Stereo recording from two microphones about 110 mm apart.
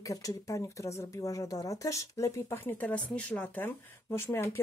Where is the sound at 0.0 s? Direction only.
30° left (ahead or behind).